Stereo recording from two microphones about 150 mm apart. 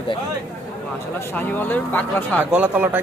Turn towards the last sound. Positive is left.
turn(degrees=-10)  # may be behind; listen again after turning